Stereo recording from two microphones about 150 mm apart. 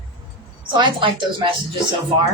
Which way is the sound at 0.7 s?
35° right (ahead or behind).